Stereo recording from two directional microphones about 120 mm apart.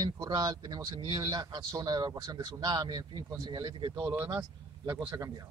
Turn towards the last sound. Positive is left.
turn(degrees=-25)  # may be behind; listen again after turning